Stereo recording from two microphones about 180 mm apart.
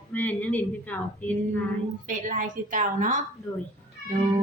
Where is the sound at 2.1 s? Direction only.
45° right (ahead or behind).